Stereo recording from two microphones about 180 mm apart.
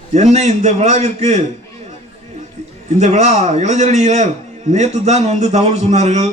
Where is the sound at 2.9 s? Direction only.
40° right (ahead or behind).